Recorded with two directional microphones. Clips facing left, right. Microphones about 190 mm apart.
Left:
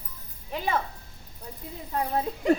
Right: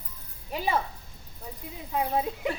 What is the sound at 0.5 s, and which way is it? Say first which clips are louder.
Speech: even; 10° right (ahead or behind).